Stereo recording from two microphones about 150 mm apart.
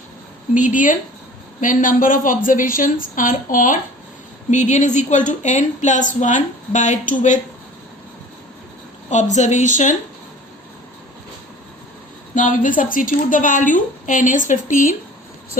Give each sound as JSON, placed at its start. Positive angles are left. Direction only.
{"t": 0.5, "sound": "a woman's voice", "side_deg": 60}
{"t": 9.0, "sound": "a woman's voice", "side_deg": 50}
{"t": 12.3, "sound": "a woman's voice", "side_deg": 60}